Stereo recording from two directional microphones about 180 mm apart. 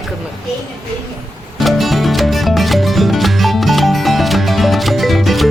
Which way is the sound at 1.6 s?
Centre (ahead or behind).